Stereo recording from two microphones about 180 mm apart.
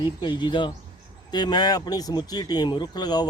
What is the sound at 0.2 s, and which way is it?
Speech, 25° left (ahead or behind).